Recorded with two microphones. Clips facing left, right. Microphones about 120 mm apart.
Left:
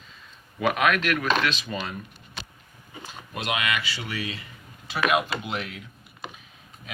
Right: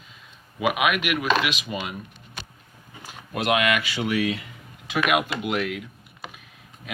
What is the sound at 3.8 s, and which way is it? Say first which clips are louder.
Speech: right 8 dB; 15° right (ahead or behind).